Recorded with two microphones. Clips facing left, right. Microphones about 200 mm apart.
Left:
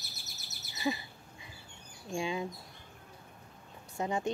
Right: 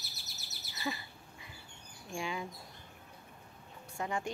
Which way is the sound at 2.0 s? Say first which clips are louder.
Left 4 dB; 20° left (ahead or behind).